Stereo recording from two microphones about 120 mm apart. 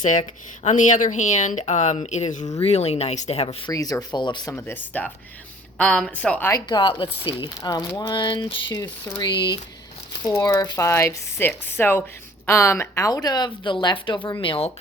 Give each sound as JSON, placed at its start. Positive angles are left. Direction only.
{"t": 0.0, "sound": "speech", "side_deg": 85}
{"t": 2.6, "sound": "speech", "side_deg": 60}
{"t": 3.7, "sound": "speech", "side_deg": 30}
{"t": 4.5, "sound": "a woman's voice", "side_deg": 15}
{"t": 6.7, "sound": "speech", "side_deg": 40}
{"t": 7.6, "sound": "speech", "side_deg": 30}